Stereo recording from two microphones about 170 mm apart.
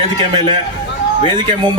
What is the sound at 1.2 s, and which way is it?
Speech, 30° right (ahead or behind).